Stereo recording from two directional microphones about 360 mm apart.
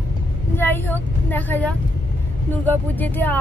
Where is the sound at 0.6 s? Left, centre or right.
Centre.